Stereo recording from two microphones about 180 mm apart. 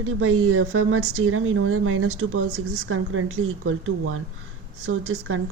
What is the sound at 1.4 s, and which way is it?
Speech, 90° right.